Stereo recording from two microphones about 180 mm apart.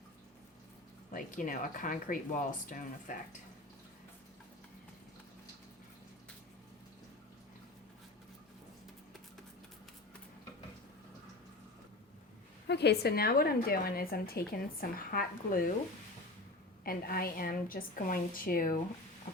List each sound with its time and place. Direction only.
1.1 s a woman's voice: 45° left (ahead or behind)
12.6 s a woman's voice: 70° left (ahead or behind); by 15.7 s 50° left (ahead or behind)
16.8 s a woman's voice: 55° left (ahead or behind)